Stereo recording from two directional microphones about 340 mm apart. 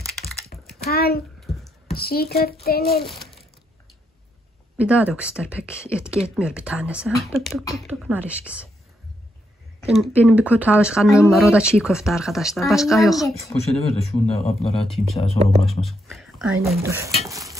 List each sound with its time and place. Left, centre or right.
0.5 s typing: left
0.8 s a sound: left
1.4 s a sound: centre
2.0 s a child's voice: left
3.1 s a sound: centre
4.7 s speech: centre
6.1 s speech: centre
6.4 s speech: centre
9.8 s speech: centre
13.3 s speech: centre
15.6 s speech: centre
17.2 s a sound: centre